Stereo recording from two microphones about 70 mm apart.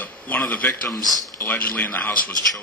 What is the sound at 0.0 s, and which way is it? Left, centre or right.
Speech, left.